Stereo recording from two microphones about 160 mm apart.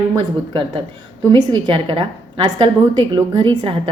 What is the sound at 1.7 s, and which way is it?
A woman's voice, 30° right (ahead or behind).